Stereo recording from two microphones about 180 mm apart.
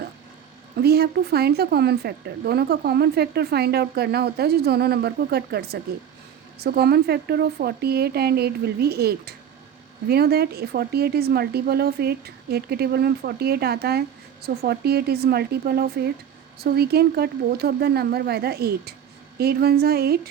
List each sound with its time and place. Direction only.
0.8 s speech: 60° right (ahead or behind)